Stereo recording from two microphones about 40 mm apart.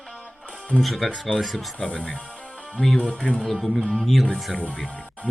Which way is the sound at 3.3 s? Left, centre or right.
Centre.